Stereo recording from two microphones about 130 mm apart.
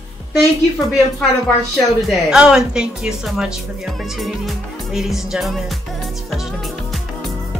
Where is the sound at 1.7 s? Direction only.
5° right (ahead or behind).